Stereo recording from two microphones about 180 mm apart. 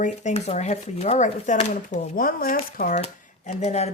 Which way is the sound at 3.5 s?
35° left (ahead or behind).